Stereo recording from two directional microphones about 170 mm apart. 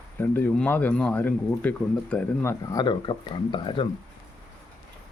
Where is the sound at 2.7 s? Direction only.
25° left (ahead or behind).